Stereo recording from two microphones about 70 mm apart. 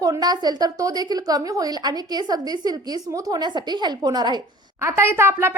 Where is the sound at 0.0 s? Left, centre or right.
Right.